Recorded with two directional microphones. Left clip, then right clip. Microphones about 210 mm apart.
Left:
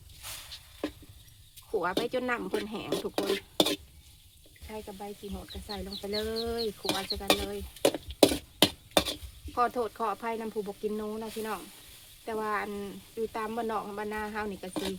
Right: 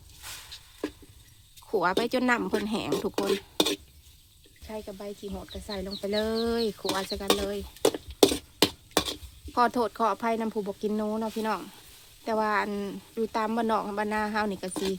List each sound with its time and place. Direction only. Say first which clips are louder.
1.7 s speech: right 4 dB; 55° right (ahead or behind)
3.2 s stir: left 1 dB; 5° left (ahead or behind)
4.7 s speech: right 3 dB; 45° right (ahead or behind)
7.9 s a sound: right 1 dB; 5° right (ahead or behind)
9.6 s speech: right 4 dB; 55° right (ahead or behind)
14.7 s speech: right 4 dB; centre (ahead or behind)